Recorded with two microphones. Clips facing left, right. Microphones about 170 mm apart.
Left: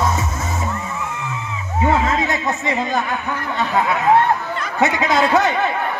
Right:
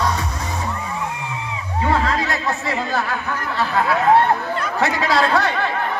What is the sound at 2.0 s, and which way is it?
Music, 20° left (ahead or behind).